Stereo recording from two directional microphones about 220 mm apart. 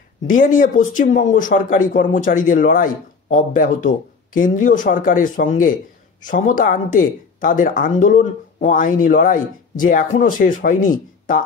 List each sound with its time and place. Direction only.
0.3 s speech: 35° left (ahead or behind)